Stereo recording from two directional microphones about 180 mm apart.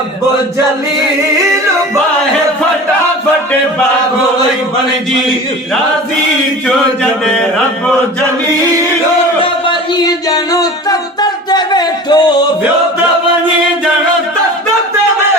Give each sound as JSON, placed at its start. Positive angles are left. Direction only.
{"t": 7.0, "sound": "speech", "side_deg": 5}
{"t": 10.2, "sound": "music", "side_deg": 20}